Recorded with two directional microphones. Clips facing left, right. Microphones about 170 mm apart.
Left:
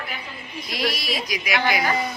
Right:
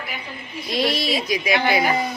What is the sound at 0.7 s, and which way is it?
A woman's voice, 25° right (ahead or behind).